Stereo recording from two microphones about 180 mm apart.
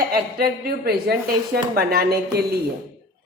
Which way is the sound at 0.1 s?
55° right (ahead or behind).